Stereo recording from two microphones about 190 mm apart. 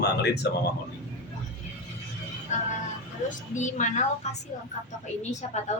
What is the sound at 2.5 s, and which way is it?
Speech, 40° left (ahead or behind).